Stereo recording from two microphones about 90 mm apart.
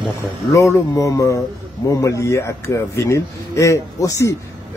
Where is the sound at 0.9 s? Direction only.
35° left (ahead or behind).